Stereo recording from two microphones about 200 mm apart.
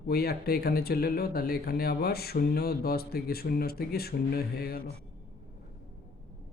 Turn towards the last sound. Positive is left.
turn(degrees=50)  # may be behind; listen again after turning